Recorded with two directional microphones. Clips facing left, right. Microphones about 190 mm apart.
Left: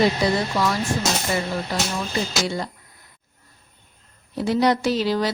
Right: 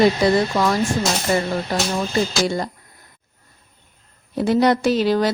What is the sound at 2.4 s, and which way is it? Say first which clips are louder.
Speech: right 4 dB; 45° right (ahead or behind).